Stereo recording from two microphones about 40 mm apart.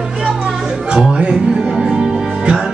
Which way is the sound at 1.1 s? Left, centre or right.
Centre.